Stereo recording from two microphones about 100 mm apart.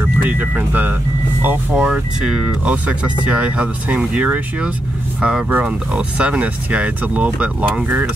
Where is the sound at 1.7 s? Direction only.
10° right (ahead or behind).